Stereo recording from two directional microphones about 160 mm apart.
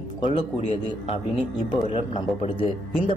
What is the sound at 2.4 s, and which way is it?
Speech, 35° left (ahead or behind).